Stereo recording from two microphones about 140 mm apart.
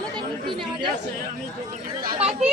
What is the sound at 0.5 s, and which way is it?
Chatter, 35° right (ahead or behind).